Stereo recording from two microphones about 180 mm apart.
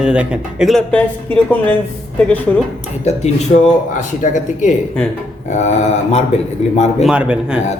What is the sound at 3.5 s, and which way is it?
Speech, 50° left (ahead or behind).